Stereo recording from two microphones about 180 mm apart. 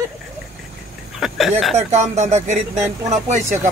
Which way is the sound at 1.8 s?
40° right (ahead or behind).